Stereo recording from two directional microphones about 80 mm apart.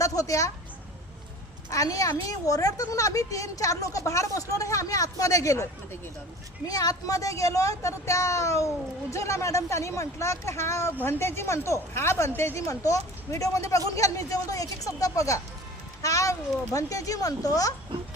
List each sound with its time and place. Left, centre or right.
0.0 s a woman's voice: left
1.7 s a woman's voice: left
6.7 s a woman's voice: left